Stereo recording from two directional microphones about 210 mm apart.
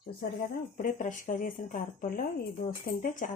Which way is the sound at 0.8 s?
40° left (ahead or behind).